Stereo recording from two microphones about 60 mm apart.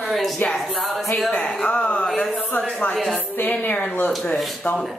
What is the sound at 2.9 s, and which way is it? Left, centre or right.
Speech, centre.